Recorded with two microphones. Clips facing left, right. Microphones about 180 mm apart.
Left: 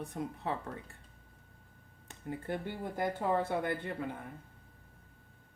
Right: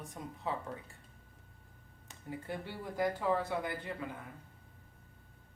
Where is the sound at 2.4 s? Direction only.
50° left (ahead or behind).